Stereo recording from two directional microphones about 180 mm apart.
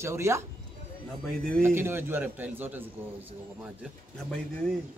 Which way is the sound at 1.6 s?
15° right (ahead or behind).